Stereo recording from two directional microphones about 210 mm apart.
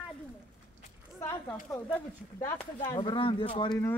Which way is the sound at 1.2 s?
15° left (ahead or behind).